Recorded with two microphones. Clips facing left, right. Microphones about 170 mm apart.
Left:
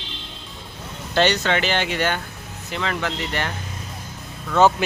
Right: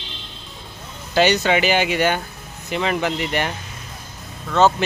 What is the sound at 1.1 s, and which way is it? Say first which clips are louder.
Speech: right 3 dB; 10° right (ahead or behind).